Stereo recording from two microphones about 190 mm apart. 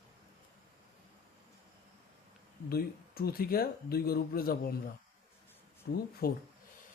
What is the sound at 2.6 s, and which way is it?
Speech, 55° left (ahead or behind).